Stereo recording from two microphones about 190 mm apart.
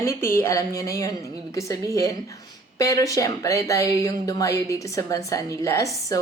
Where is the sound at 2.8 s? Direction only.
15° left (ahead or behind).